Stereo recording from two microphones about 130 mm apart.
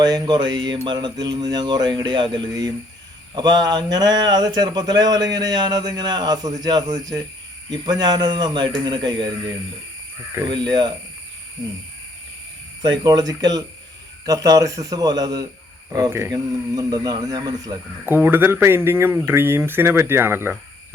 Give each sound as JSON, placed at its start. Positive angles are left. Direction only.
{"t": 0.0, "sound": "speech", "side_deg": -35}
{"t": 10.4, "sound": "speech", "side_deg": -35}
{"t": 12.8, "sound": "speech", "side_deg": -35}
{"t": 18.0, "sound": "speech", "side_deg": -15}